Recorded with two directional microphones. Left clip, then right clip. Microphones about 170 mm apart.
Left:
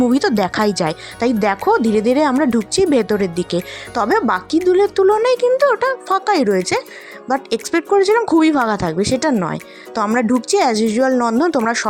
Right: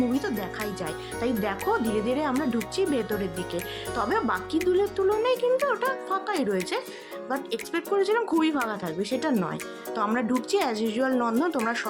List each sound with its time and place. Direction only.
0.1 s speech: 50° left (ahead or behind)